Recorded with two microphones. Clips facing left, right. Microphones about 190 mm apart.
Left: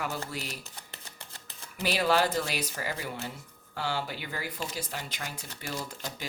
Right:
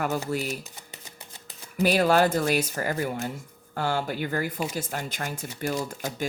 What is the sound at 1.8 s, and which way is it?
Speech, 50° right (ahead or behind).